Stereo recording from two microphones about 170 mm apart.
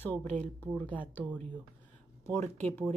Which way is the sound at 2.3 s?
10° left (ahead or behind).